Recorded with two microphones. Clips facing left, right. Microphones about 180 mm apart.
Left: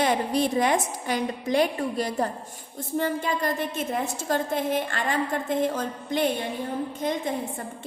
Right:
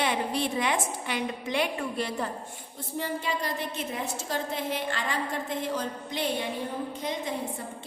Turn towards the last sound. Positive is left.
turn(degrees=50)  # may be behind; listen again after turning